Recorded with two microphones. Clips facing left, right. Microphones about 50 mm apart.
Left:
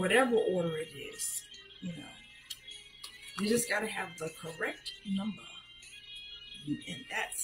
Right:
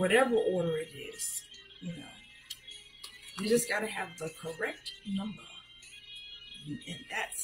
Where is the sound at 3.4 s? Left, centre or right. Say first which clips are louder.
Right 2 dB; centre.